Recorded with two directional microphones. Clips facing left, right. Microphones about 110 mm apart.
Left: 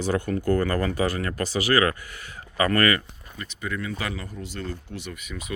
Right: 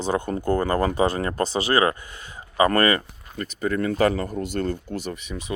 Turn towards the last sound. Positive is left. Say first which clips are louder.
# right 4 dB
turn(degrees=-30)  # may be behind; listen again after turning